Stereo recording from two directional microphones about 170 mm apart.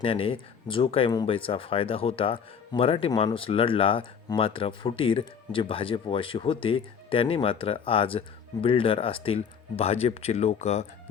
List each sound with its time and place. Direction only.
0.0 s speech: 35° left (ahead or behind)